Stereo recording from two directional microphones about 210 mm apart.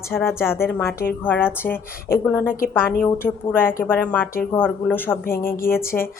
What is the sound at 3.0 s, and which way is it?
A woman's voice, 10° left (ahead or behind).